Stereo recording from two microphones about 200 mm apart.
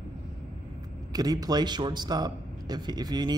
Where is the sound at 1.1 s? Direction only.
20° right (ahead or behind).